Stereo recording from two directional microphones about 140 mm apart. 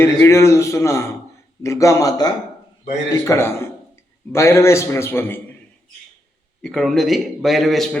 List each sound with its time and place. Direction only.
0.0 s a man's voice: 20° left (ahead or behind)
6.6 s a man's voice: 5° left (ahead or behind)